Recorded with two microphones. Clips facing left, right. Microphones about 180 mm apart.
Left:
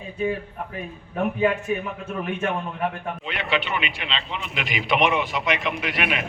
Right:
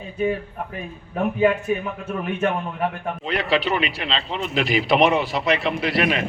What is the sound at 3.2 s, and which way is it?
Speech, 35° right (ahead or behind).